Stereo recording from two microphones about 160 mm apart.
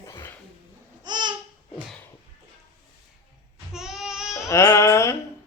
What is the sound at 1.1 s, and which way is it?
Babbling, 25° right (ahead or behind).